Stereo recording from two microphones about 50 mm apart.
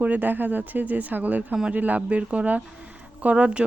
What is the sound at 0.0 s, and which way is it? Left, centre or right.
A woman's voice, right.